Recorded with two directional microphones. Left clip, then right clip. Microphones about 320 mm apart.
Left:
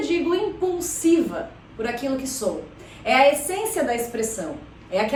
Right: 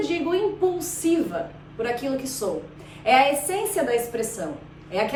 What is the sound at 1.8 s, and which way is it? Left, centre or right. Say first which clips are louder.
A woman's voice: even; centre.